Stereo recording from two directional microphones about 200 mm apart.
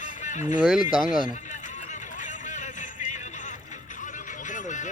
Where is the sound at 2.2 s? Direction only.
40° left (ahead or behind).